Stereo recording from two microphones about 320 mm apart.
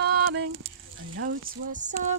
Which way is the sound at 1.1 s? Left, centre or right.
Right.